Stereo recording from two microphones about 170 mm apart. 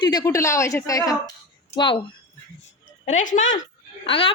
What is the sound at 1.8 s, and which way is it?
Speech, 30° left (ahead or behind).